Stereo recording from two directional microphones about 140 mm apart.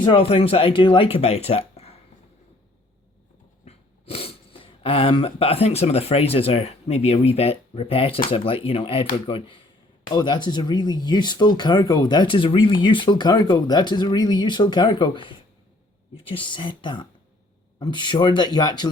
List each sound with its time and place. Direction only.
0.0 s speech: 40° left (ahead or behind)
3.7 s speech: 45° left (ahead or behind)